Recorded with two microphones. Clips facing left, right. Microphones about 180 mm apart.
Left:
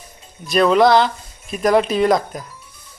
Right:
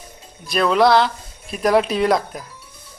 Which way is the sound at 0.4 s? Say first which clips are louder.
Left 3 dB; centre (ahead or behind).